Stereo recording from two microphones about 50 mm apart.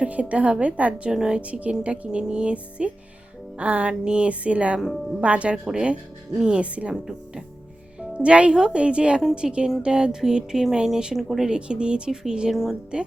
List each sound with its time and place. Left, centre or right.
0.0 s music: right
1.1 s speech: centre
1.4 s music: right
8.1 s music: right
9.8 s speech: centre